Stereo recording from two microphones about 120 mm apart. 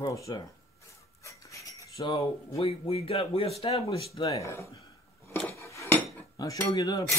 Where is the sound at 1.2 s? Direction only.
25° left (ahead or behind).